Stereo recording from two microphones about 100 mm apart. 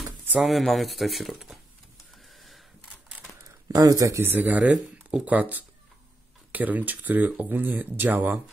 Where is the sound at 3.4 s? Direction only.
35° right (ahead or behind).